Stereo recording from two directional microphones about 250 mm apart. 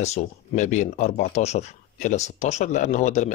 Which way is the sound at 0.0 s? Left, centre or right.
Left.